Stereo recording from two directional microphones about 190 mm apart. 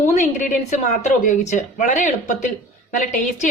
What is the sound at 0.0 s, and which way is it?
A woman's voice, 40° left (ahead or behind).